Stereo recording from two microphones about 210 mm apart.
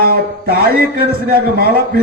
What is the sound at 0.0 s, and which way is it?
A man's voice, 50° right (ahead or behind).